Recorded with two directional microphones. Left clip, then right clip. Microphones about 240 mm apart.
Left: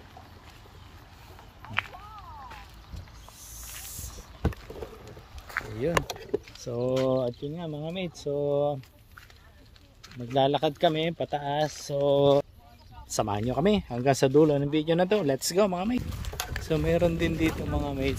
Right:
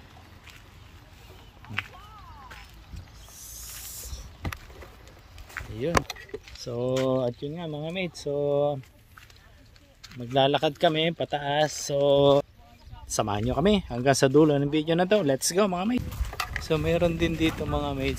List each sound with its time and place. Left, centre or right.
1.6 s a sound: centre
3.9 s vehicle: centre
5.8 s speech: centre
10.0 s a sound: centre
10.3 s speech: centre
13.1 s speech: centre